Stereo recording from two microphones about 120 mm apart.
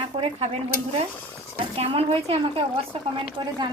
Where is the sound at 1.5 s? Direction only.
60° right (ahead or behind).